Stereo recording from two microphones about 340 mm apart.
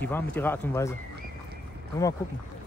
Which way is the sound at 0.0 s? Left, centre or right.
Centre.